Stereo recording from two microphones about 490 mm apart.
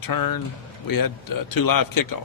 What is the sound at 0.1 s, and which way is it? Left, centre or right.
A man's voice, left.